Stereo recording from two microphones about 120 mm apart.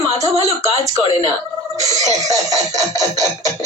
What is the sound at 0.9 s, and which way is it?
Speech, 55° right (ahead or behind).